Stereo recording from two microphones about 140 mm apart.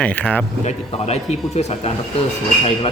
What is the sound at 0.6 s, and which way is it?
A man's voice, 50° left (ahead or behind).